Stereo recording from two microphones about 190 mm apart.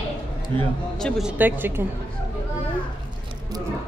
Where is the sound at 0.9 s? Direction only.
Centre (ahead or behind).